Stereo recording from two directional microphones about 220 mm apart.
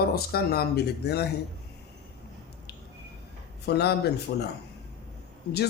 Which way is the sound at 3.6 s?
50° left (ahead or behind).